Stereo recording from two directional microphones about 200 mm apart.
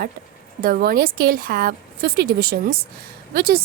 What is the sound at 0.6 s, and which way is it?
A woman's voice, 50° right (ahead or behind).